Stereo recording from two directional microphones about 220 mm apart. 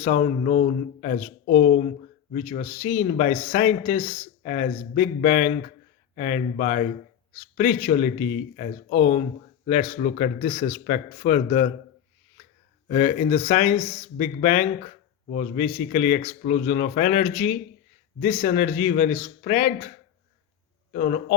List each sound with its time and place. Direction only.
0.0 s speech: 35° left (ahead or behind)
12.9 s speech: 30° left (ahead or behind)
20.9 s speech: 35° left (ahead or behind)